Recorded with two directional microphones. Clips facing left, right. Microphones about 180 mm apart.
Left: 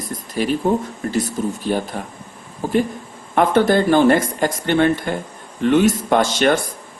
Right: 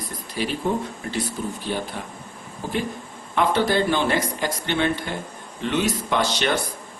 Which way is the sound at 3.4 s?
50° left (ahead or behind).